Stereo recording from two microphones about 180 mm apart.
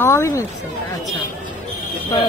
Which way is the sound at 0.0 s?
15° left (ahead or behind).